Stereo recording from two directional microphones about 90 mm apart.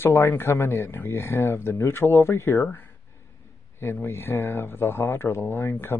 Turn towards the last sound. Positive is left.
turn(degrees=25)  # may be behind; listen again after turning